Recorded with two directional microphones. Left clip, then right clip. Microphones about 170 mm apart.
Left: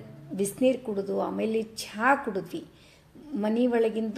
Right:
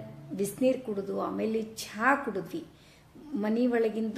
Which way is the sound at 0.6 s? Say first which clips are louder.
Left 3 dB; 15° left (ahead or behind).